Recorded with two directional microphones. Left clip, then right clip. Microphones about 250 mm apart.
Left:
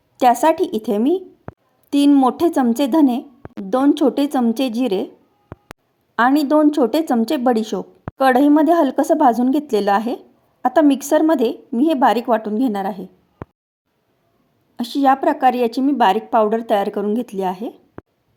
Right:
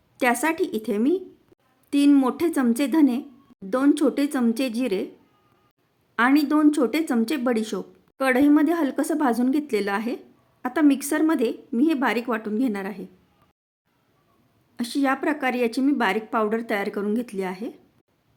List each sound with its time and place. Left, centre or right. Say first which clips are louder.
0.2 s a woman's voice: left 8 dB; centre
6.1 s a woman's voice: left 6 dB; centre
14.8 s a woman's voice: left 8 dB; centre